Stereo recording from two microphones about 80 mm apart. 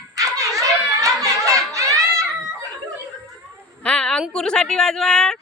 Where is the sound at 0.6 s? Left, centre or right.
Right.